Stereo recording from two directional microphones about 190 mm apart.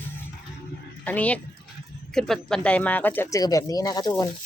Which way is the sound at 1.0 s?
10° left (ahead or behind).